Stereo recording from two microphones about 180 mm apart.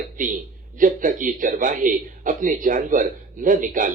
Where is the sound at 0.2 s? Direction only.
45° right (ahead or behind).